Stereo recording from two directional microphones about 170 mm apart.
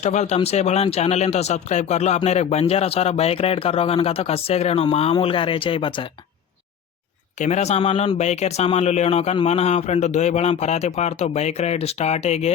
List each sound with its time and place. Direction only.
0.0 s speech: 45° left (ahead or behind)
7.3 s speech: 45° left (ahead or behind)